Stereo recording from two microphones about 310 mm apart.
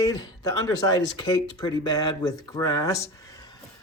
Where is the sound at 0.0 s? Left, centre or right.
Centre.